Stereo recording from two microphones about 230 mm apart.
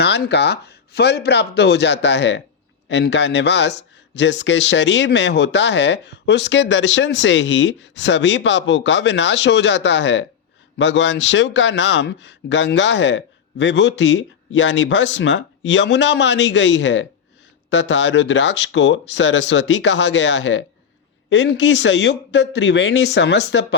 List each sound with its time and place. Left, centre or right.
0.0 s a man's voice: left